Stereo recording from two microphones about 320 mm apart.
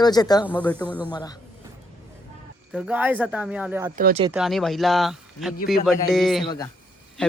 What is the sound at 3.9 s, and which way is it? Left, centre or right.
Speech, right.